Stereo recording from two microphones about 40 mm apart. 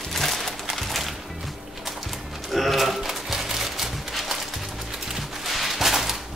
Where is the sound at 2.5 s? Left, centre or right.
Centre.